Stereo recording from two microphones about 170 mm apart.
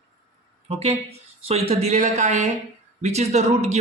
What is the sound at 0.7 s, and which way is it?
Speech, 35° right (ahead or behind).